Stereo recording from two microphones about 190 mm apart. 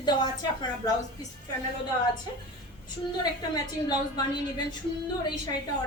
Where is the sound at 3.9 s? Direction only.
20° left (ahead or behind).